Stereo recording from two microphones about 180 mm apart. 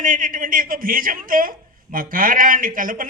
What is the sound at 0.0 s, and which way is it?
A man's voice, 50° right (ahead or behind).